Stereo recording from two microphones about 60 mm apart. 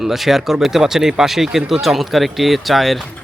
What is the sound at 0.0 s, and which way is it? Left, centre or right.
Speech, centre.